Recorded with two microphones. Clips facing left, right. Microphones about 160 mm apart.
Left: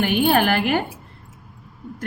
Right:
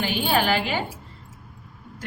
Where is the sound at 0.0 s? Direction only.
55° left (ahead or behind).